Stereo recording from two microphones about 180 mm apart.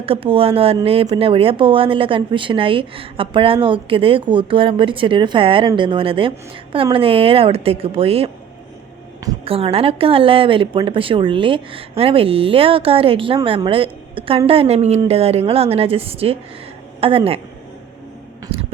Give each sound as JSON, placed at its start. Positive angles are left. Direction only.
{"t": 0.0, "sound": "a woman's voice", "side_deg": -30}
{"t": 9.4, "sound": "a woman's voice", "side_deg": -30}